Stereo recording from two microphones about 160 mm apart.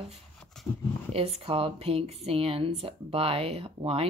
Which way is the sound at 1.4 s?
35° right (ahead or behind).